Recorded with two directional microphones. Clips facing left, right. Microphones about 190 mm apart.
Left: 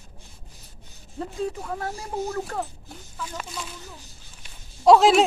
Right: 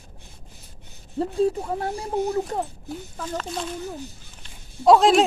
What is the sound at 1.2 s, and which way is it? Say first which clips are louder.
Speech: right 7 dB; 30° right (ahead or behind).